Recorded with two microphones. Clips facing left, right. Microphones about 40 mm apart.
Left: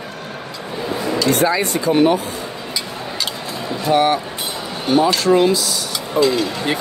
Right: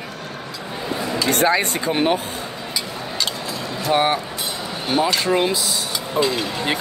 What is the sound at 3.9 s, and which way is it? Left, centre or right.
Speech, centre.